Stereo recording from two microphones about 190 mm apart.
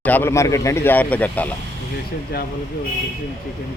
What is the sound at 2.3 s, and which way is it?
Speech, 55° left (ahead or behind).